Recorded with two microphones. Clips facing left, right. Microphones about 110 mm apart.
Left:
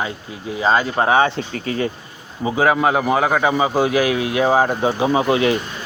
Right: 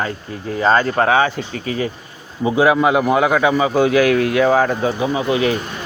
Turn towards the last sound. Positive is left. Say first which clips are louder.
# left 2 dB
turn(degrees=25)  # may be behind; listen again after turning